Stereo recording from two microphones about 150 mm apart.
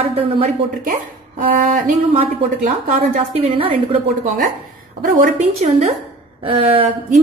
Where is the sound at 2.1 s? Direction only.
40° right (ahead or behind).